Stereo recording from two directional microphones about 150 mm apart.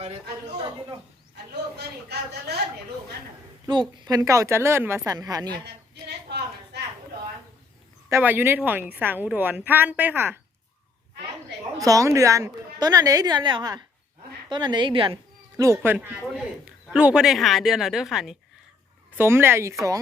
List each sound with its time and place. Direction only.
0.5 s a woman's voice: 30° right (ahead or behind)
1.8 s a woman's voice: 90° right
3.7 s a woman's voice: 30° right (ahead or behind)
5.6 s a sound: 90° right
8.1 s a woman's voice: 15° right (ahead or behind)
11.8 s a woman's voice: 25° right (ahead or behind)
15.5 s a woman's voice: 20° right (ahead or behind); by 18.3 s centre (ahead or behind)
19.1 s a woman's voice: 15° right (ahead or behind)